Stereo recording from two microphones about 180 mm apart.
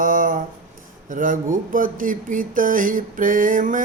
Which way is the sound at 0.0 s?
50° right (ahead or behind).